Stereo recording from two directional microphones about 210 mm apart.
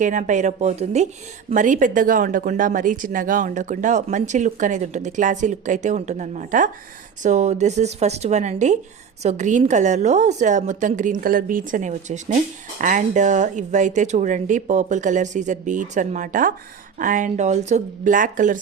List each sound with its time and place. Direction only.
0.0 s speech: 35° right (ahead or behind)